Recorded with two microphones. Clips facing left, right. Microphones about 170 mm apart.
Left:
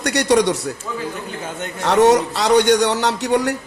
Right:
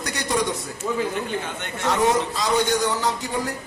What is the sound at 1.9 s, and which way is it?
Speech, 75° left (ahead or behind).